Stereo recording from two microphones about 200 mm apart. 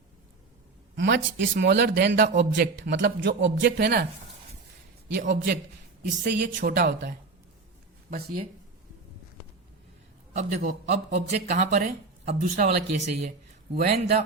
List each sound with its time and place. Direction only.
0.9 s a man's voice: 60° right (ahead or behind)
5.1 s a woman's voice: 50° right (ahead or behind)
10.3 s speech: 35° right (ahead or behind)